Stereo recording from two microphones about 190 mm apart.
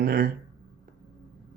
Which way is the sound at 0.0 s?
50° right (ahead or behind).